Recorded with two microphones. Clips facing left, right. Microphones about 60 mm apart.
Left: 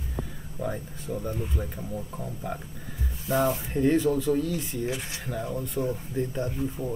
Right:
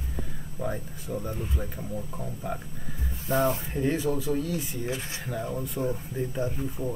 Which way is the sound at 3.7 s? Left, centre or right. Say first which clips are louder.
Left 4 dB; centre.